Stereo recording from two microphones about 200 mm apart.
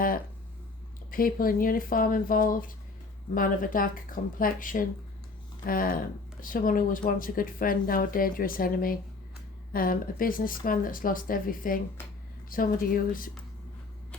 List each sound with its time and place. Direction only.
1.1 s speech: 45° left (ahead or behind)